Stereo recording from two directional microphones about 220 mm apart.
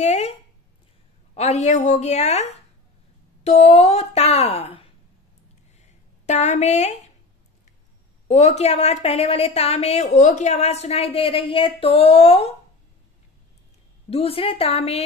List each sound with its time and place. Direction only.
0.0 s speech: 30° left (ahead or behind)
1.3 s a woman's voice: 30° left (ahead or behind)
6.2 s a woman's voice: 30° left (ahead or behind)
8.3 s a woman's voice: 30° left (ahead or behind)
14.1 s a woman's voice: 25° left (ahead or behind)